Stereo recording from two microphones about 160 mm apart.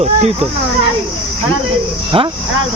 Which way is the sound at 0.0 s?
40° right (ahead or behind).